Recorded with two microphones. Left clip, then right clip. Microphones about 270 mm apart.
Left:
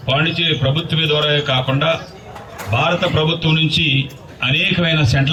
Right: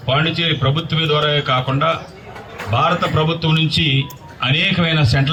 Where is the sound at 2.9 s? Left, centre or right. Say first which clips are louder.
Left 3 dB; right.